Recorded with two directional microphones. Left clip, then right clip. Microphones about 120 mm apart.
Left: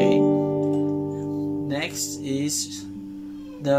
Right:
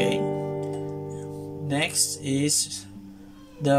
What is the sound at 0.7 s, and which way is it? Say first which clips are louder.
Music: left 8 dB; 15° left (ahead or behind).